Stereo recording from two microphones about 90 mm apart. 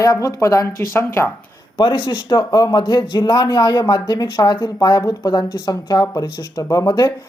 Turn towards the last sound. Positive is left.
turn(degrees=45)  # may be behind; listen again after turning